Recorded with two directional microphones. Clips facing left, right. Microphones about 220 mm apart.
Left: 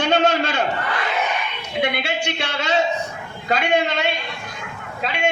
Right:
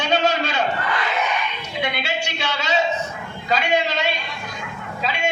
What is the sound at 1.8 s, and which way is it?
A man's voice, 55° left (ahead or behind).